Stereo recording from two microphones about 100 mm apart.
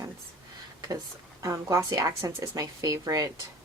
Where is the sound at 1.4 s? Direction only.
30° right (ahead or behind).